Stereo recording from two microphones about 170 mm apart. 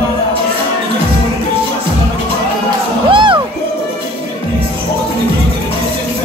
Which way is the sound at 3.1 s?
30° right (ahead or behind).